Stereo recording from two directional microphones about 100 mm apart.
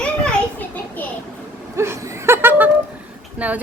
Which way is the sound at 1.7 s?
25° right (ahead or behind).